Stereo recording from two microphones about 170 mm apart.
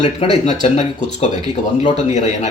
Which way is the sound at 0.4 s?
40° left (ahead or behind).